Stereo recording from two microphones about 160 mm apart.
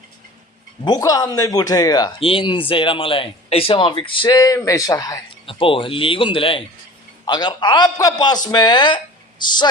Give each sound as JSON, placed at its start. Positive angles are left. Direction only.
{"t": 0.9, "sound": "speech", "side_deg": 25}
{"t": 2.1, "sound": "speech", "side_deg": 35}